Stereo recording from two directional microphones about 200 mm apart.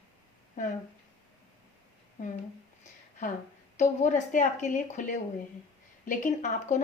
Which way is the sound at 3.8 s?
40° left (ahead or behind).